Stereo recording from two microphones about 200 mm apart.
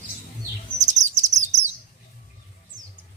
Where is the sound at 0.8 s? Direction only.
35° right (ahead or behind).